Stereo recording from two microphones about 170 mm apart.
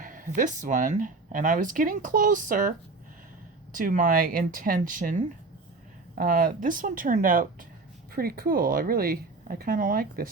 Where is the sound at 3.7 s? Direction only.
55° right (ahead or behind).